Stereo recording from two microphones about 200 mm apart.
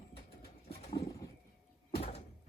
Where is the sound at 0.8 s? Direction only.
30° left (ahead or behind).